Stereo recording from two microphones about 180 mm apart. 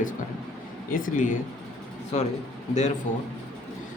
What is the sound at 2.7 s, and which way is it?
Speech, 40° left (ahead or behind).